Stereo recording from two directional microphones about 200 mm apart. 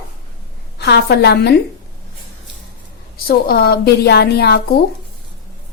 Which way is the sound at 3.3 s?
50° left (ahead or behind).